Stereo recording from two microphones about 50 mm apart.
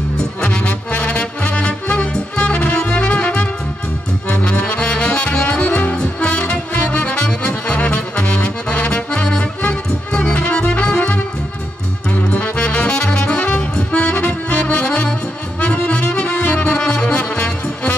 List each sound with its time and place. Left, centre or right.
0.4 s music: left
4.3 s music: left
5.3 s saxophone: left
5.9 s music: left